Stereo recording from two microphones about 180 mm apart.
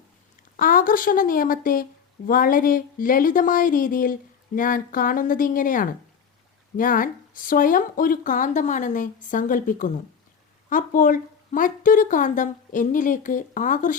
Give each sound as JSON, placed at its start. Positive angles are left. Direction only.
{"t": 0.5, "sound": "speech", "side_deg": 50}